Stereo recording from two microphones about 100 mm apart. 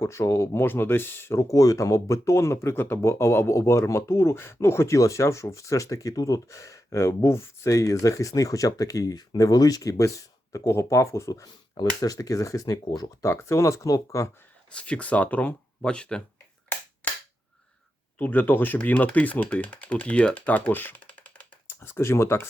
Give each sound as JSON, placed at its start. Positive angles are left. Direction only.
{"t": 0.0, "sound": "speech", "side_deg": 25}
{"t": 14.8, "sound": "speech", "side_deg": 10}
{"t": 17.0, "sound": "cap gun", "side_deg": 15}
{"t": 18.2, "sound": "speech", "side_deg": 20}